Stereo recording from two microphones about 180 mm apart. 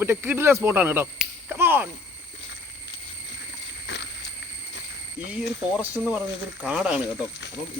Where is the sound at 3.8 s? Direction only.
80° left.